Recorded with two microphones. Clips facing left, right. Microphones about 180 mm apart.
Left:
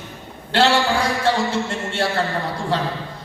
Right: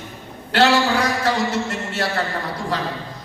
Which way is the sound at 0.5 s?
25° left (ahead or behind).